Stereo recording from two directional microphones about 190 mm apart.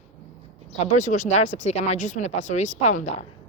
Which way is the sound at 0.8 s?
40° left (ahead or behind).